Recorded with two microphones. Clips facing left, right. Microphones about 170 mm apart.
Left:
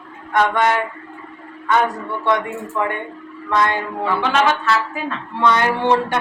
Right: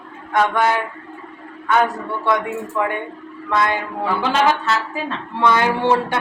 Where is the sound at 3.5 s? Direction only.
5° right (ahead or behind).